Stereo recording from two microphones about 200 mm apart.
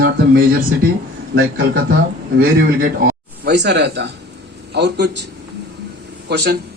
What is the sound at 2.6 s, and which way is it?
A man's voice, 45° right (ahead or behind).